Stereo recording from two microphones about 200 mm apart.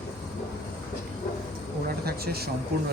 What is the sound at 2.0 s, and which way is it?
Speech, 50° right (ahead or behind).